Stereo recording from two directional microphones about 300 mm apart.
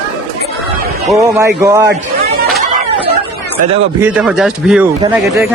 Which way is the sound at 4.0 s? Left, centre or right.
Centre.